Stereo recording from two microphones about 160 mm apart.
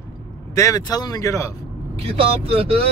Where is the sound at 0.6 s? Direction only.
20° left (ahead or behind).